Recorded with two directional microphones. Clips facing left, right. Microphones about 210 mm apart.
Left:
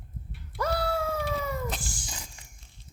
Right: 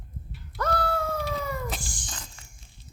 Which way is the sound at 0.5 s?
10° left (ahead or behind).